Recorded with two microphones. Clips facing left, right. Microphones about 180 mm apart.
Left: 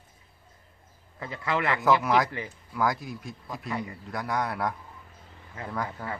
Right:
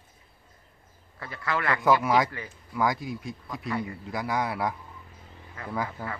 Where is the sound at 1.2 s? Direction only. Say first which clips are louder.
Left 1 dB; 20° left (ahead or behind).